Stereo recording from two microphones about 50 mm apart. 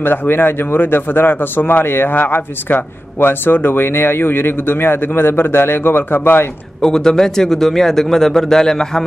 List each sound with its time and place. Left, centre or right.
0.0 s a man's voice: left
6.8 s a man's voice: centre